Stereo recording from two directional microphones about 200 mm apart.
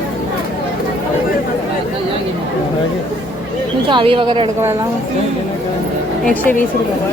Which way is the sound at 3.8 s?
25° right (ahead or behind).